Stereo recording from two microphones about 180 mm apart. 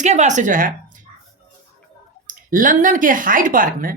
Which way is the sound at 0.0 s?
40° right (ahead or behind).